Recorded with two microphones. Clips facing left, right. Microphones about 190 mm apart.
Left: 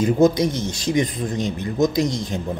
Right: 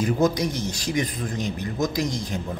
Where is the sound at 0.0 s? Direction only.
25° left (ahead or behind).